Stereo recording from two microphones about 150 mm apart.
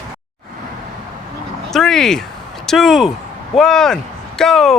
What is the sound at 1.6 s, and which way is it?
Speech, 5° left (ahead or behind).